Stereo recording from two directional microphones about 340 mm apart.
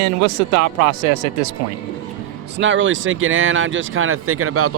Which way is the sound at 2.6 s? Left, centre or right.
Right.